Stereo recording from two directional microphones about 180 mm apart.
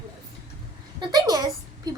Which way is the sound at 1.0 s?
20° right (ahead or behind).